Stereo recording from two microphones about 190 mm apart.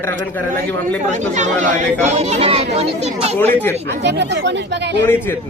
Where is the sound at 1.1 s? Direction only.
40° right (ahead or behind).